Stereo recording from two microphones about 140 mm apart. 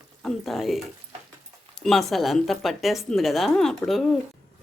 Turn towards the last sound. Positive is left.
turn(degrees=0)  # may be behind; listen again after turning